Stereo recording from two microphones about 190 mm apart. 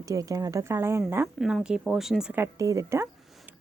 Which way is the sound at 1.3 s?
Centre (ahead or behind).